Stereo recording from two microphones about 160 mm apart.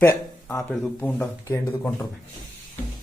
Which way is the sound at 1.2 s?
20° left (ahead or behind).